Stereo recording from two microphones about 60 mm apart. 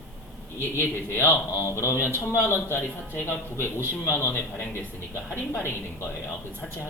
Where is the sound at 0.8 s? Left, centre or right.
Left.